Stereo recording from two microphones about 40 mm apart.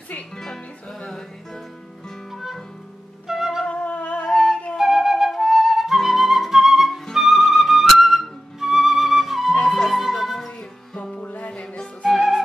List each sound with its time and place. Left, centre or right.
0.4 s music: centre
2.3 s music: centre
3.3 s flute: centre
3.6 s music: left
4.3 s music: centre
4.7 s flute: centre
11.2 s music: left
12.0 s music: centre